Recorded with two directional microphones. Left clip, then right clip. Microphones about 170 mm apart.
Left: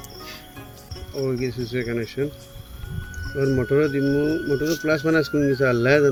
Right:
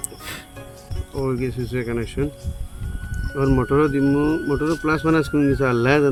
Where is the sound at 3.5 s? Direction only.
50° right (ahead or behind).